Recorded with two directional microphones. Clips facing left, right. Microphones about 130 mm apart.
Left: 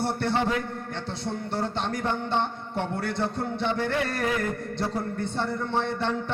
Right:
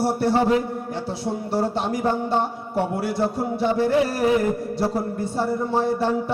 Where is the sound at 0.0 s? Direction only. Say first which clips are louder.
Right 6 dB; 5° right (ahead or behind).